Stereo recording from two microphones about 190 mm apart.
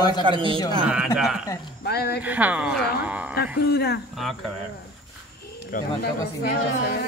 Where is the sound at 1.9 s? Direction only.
60° left (ahead or behind).